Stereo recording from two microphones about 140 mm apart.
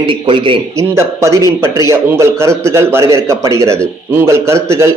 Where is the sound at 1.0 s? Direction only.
20° right (ahead or behind).